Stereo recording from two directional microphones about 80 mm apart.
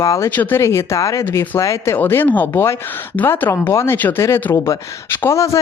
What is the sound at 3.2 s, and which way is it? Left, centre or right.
Speech, left.